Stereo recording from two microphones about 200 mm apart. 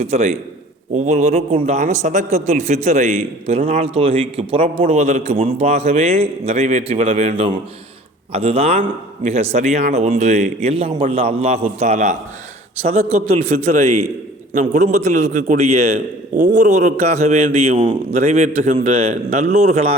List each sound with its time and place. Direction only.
0.0 s a man's voice: 35° right (ahead or behind)